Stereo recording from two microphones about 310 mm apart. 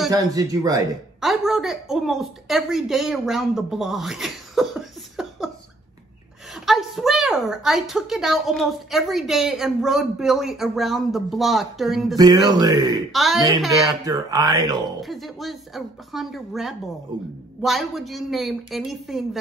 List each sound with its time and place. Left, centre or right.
0.1 s speech: centre
1.2 s a woman's voice: centre
6.5 s a woman's voice: centre
12.2 s speech: centre
13.1 s a woman's voice: centre
13.7 s speech: centre
15.0 s a woman's voice: centre
17.1 s speech: centre
17.6 s a woman's voice: centre